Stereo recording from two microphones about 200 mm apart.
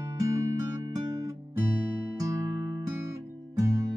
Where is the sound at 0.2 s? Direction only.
15° right (ahead or behind).